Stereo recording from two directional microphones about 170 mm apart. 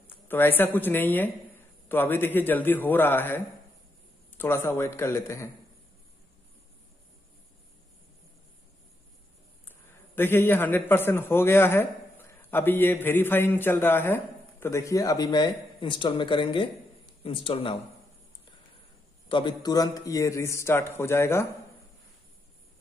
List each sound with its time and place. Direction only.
0.0 s a man's voice: 10° left (ahead or behind)
9.7 s a man's voice: 10° left (ahead or behind); by 17.8 s 30° left (ahead or behind)
19.2 s a man's voice: 30° left (ahead or behind)